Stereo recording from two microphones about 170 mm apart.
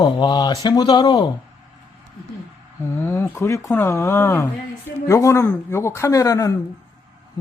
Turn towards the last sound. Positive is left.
turn(degrees=20)  # may be behind; listen again after turning